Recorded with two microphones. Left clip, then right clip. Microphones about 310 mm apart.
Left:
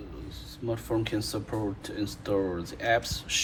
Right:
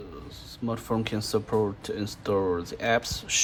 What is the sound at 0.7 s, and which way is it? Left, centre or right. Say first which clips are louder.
Speech: even; right.